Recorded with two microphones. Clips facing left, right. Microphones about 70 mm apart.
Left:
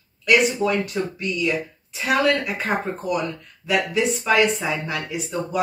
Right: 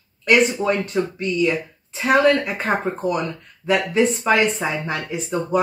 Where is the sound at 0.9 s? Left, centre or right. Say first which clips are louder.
Right 3 dB; right.